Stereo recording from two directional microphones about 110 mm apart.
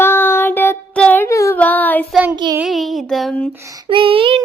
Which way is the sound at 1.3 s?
25° left (ahead or behind).